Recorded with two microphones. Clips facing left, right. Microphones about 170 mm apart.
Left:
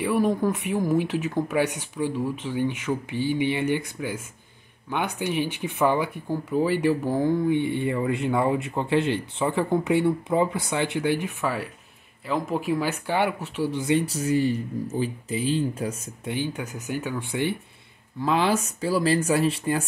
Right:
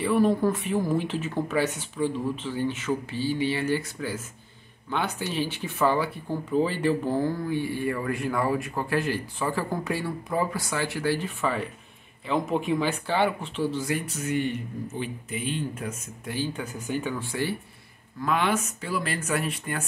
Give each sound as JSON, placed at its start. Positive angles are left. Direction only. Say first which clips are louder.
{"t": 0.0, "sound": "speech", "louder": "even", "side_deg": 10}
{"t": 16.3, "sound": "speech", "louder": "even", "side_deg": 15}
{"t": 18.2, "sound": "speech", "louder": "left 3 dB", "side_deg": 30}